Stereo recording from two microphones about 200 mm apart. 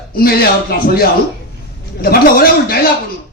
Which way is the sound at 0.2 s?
50° left (ahead or behind).